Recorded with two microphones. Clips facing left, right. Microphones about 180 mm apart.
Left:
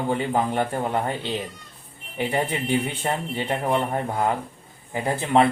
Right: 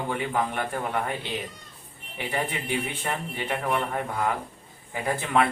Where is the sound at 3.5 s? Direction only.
30° left (ahead or behind).